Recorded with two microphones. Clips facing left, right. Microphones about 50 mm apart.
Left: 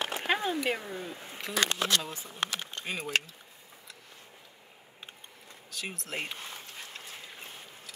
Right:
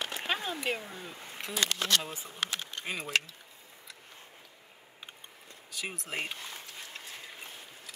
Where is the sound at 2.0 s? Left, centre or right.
Right.